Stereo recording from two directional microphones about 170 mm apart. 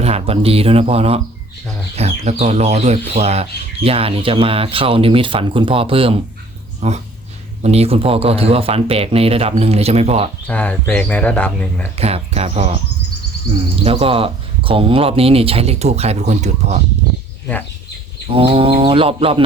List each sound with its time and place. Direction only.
0.0 s speech: 35° right (ahead or behind)
10.4 s speech: 10° left (ahead or behind)
11.9 s speech: 35° right (ahead or behind)
13.8 s speech: 35° right (ahead or behind)
18.3 s speech: 35° right (ahead or behind)